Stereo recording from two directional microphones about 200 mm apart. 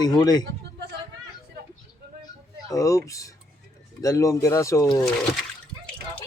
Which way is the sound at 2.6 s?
15° left (ahead or behind).